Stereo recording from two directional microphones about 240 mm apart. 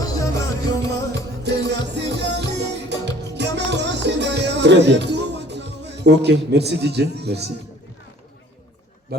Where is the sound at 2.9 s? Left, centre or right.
Right.